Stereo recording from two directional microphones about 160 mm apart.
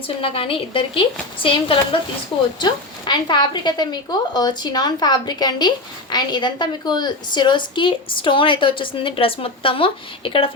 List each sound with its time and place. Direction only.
0.2 s a woman's voice: 35° left (ahead or behind)